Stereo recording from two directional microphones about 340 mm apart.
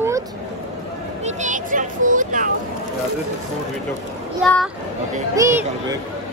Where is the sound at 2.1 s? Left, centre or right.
Right.